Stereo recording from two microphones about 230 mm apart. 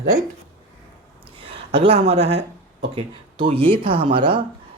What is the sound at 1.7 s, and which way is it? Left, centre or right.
Speech, right.